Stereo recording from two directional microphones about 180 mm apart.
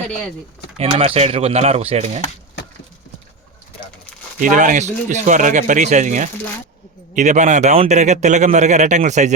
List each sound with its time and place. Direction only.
0.8 s a man's voice: 35° right (ahead or behind)
4.4 s a man's voice: 45° right (ahead or behind)